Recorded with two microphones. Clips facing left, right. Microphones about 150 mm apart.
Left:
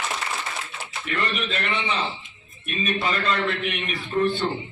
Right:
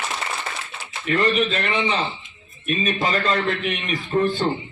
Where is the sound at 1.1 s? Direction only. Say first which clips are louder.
Right 8 dB; 35° right (ahead or behind).